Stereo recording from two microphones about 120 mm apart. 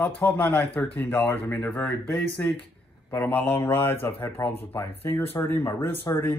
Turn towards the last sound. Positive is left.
turn(degrees=20)  # may be behind; listen again after turning